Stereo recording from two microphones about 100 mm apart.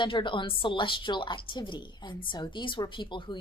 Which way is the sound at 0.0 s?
55° left (ahead or behind).